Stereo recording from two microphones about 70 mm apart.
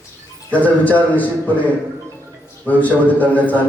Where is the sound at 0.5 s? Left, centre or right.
Left.